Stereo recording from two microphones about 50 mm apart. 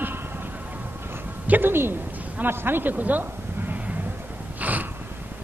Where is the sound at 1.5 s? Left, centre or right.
Right.